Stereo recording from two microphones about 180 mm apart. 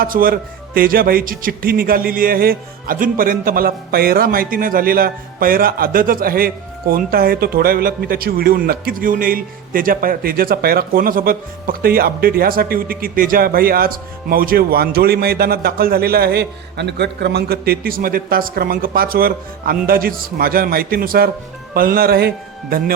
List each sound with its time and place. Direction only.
0.0 s speech: 50° right (ahead or behind)